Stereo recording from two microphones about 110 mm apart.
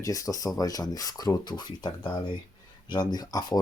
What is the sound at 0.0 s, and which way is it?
Speech, 30° left (ahead or behind).